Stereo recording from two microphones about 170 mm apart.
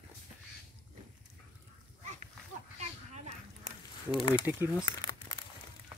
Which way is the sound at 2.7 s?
40° right (ahead or behind).